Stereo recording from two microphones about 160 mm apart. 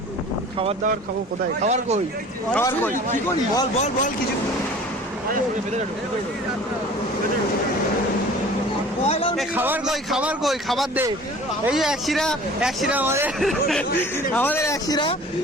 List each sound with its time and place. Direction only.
1.6 s speech: 45° right (ahead or behind)
2.6 s speech: 15° left (ahead or behind)
3.8 s speech: 45° left (ahead or behind)
9.0 s a man's voice: 40° left (ahead or behind)
9.6 s speech: 10° right (ahead or behind)
13.4 s speech: centre (ahead or behind)
14.3 s speech: 10° left (ahead or behind)